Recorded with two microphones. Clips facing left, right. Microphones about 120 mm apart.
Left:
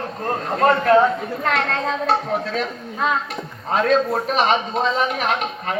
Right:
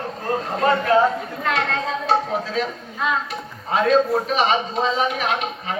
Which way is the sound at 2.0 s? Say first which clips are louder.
Right 2 dB; 45° left (ahead or behind).